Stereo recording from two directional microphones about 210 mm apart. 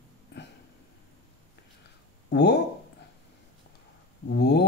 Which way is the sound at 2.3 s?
55° left (ahead or behind).